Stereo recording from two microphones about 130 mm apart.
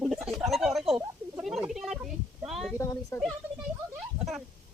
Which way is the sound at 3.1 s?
20° left (ahead or behind).